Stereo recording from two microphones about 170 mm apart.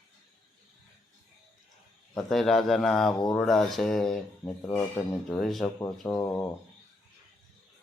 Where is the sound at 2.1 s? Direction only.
Centre (ahead or behind).